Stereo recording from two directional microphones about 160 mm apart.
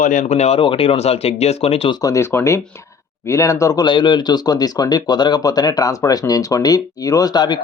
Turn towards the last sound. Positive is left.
turn(degrees=25)  # may be behind; listen again after turning